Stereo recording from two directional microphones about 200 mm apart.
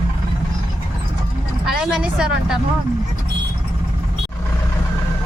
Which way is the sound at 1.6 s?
5° right (ahead or behind).